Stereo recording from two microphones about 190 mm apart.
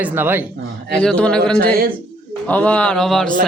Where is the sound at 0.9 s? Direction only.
5° left (ahead or behind).